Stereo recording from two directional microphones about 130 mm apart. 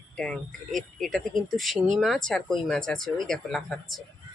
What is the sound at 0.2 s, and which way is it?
Speech, 5° left (ahead or behind).